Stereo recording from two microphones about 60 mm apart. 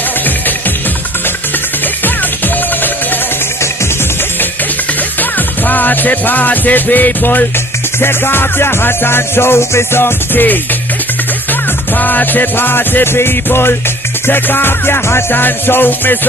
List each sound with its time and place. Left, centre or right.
5.7 s music: left
12.0 s music: left